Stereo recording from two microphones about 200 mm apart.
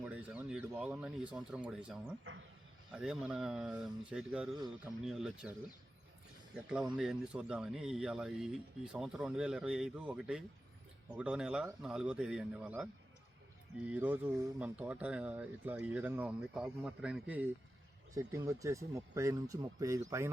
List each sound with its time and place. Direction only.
0.0 s speech: 5° right (ahead or behind)
6.7 s speech: 5° right (ahead or behind)